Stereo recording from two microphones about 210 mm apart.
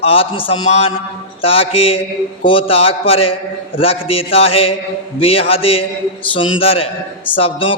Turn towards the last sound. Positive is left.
turn(degrees=25)  # may be behind; listen again after turning